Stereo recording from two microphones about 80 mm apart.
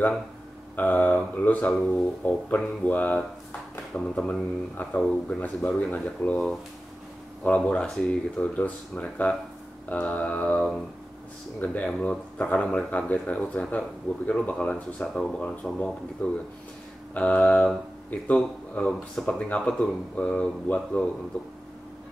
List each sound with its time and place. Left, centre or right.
0.7 s speech: left
1.7 s speech: centre
7.6 s speech: centre
11.6 s speech: centre